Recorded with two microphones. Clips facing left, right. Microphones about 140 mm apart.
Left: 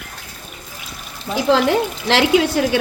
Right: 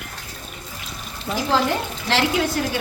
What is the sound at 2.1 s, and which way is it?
Speech, 75° left (ahead or behind).